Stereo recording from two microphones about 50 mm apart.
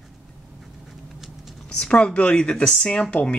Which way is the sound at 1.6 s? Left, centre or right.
Centre.